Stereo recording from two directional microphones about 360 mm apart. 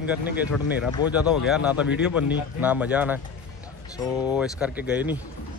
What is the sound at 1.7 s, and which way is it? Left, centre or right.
Speech, left.